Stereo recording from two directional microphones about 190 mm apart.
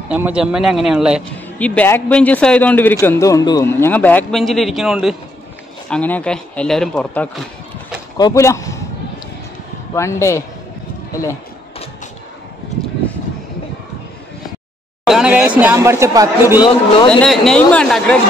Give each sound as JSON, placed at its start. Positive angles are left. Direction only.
{"t": 0.1, "sound": "speech", "side_deg": -5}
{"t": 1.6, "sound": "a man's voice", "side_deg": 10}
{"t": 8.2, "sound": "speech", "side_deg": 15}
{"t": 9.9, "sound": "a man's voice", "side_deg": 15}
{"t": 15.0, "sound": "speech", "side_deg": -5}
{"t": 16.6, "sound": "a man's voice", "side_deg": 25}
{"t": 17.2, "sound": "speech", "side_deg": 5}